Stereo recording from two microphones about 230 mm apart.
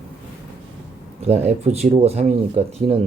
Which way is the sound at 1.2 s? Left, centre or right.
Right.